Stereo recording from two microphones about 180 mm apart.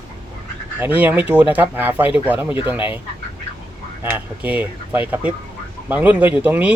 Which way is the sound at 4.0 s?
10° right (ahead or behind).